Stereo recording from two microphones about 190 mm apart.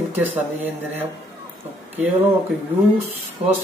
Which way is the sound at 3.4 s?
30° right (ahead or behind).